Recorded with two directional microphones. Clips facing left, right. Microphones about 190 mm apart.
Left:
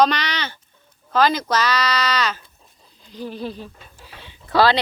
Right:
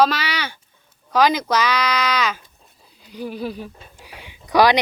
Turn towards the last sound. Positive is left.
turn(degrees=-15)  # may be behind; listen again after turning